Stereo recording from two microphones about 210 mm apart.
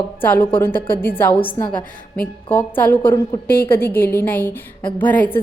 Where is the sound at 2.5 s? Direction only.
10° left (ahead or behind).